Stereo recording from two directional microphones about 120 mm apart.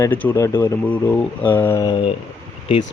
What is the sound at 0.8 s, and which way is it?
Speech, 10° left (ahead or behind).